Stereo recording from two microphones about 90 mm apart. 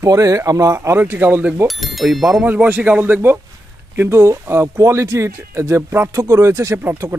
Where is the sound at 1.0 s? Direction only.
20° right (ahead or behind).